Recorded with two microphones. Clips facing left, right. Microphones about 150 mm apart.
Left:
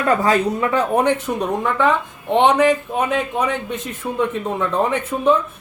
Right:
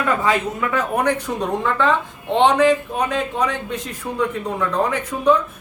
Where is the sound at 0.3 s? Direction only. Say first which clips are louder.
Left 3 dB; 30° left (ahead or behind).